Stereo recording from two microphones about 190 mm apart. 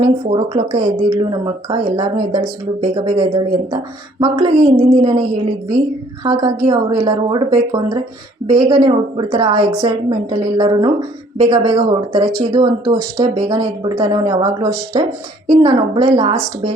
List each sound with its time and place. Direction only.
0.0 s speech: 25° right (ahead or behind)
6.2 s speech: 25° right (ahead or behind)